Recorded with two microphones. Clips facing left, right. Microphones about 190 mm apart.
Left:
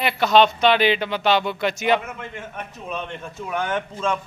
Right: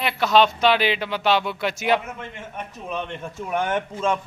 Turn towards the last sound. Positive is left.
turn(degrees=-20)  # may be behind; listen again after turning